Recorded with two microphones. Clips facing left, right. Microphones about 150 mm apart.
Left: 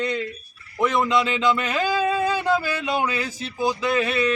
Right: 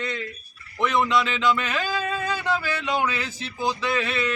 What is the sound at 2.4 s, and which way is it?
A man's voice, 10° left (ahead or behind).